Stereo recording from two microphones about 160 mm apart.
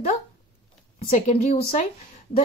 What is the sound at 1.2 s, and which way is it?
Speech, 40° left (ahead or behind).